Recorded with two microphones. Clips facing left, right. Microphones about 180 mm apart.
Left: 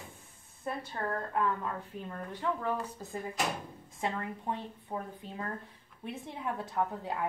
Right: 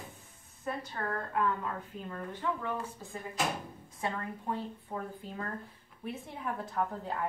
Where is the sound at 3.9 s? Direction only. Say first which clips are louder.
Left 1 dB; 25° left (ahead or behind).